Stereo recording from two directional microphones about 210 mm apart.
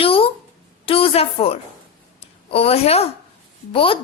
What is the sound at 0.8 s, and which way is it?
A woman's voice, 25° left (ahead or behind).